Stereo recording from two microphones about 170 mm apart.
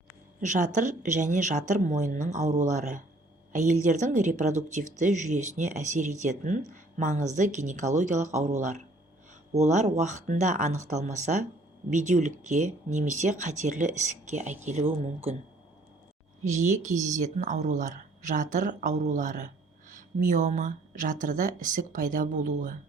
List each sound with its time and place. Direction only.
0.3 s speech: 50° right (ahead or behind)
16.4 s speech: 45° right (ahead or behind)